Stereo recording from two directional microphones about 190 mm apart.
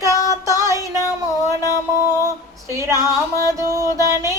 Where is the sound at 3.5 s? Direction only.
15° right (ahead or behind).